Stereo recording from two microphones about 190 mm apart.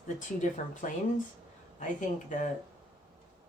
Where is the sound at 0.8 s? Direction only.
40° left (ahead or behind).